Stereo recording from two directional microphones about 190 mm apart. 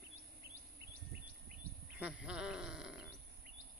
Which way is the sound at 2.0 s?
5° right (ahead or behind).